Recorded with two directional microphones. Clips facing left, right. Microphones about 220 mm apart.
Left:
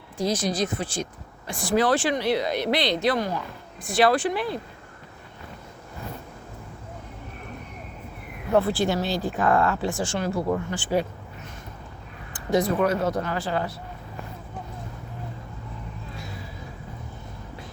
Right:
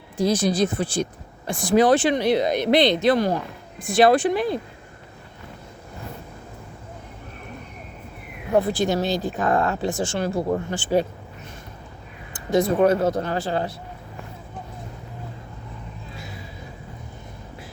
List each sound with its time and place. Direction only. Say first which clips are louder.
0.3 s speech: right 5 dB; 30° right (ahead or behind)
1.5 s speech: right 5 dB; 20° right (ahead or behind)
8.5 s speech: right 2 dB; 15° right (ahead or behind)
12.5 s speech: right 4 dB; 25° right (ahead or behind)